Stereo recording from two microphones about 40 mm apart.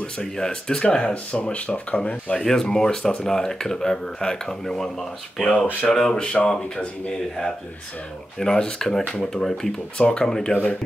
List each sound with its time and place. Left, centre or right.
0.0 s speech: left
2.6 s speech: centre